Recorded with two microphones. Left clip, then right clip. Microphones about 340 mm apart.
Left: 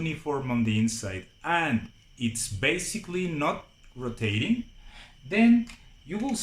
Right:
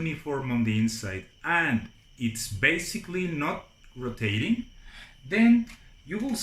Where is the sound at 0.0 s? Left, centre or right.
Centre.